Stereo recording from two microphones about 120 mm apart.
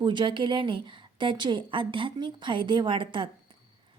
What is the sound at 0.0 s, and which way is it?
A woman's voice, 40° right (ahead or behind).